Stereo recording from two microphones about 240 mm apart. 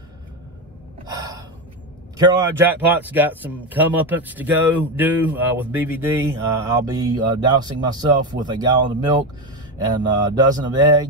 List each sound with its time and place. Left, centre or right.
1.0 s gasp: centre
2.1 s speech: centre